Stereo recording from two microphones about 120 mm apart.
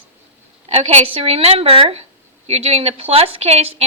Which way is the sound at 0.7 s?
55° right (ahead or behind).